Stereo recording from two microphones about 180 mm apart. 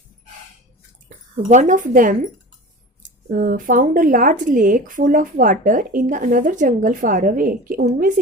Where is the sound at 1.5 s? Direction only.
45° right (ahead or behind).